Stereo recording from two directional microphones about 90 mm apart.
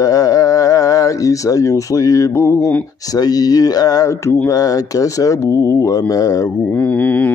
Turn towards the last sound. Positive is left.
turn(degrees=15)  # may be behind; listen again after turning